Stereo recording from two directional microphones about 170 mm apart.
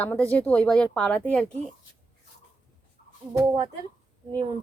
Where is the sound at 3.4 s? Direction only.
25° right (ahead or behind).